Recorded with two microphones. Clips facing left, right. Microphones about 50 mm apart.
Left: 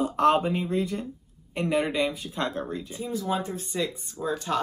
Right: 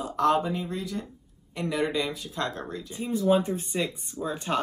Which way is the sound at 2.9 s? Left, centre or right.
Right.